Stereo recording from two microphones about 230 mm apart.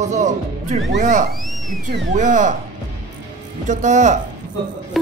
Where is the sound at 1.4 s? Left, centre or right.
Centre.